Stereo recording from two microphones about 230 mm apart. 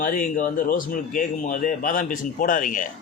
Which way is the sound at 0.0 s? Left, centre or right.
Left.